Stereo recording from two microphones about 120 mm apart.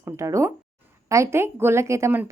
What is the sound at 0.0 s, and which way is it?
A woman's voice, 25° right (ahead or behind).